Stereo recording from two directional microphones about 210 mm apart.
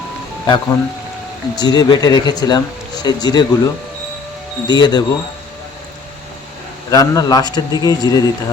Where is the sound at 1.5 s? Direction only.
20° left (ahead or behind).